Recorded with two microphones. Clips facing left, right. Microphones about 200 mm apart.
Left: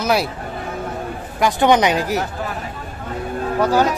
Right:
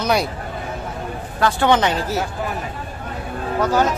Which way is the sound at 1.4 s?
15° left (ahead or behind).